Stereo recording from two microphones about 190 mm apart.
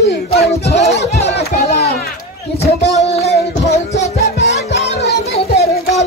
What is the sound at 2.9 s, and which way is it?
Music, 35° left (ahead or behind).